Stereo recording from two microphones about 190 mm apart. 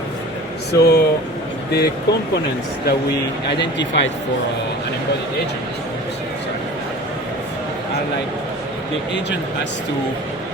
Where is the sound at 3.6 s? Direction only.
70° left (ahead or behind).